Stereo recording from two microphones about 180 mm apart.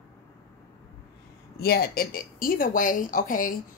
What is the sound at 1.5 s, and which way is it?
A woman's voice, 60° left (ahead or behind).